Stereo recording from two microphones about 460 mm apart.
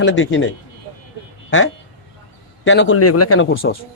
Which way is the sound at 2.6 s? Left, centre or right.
Left.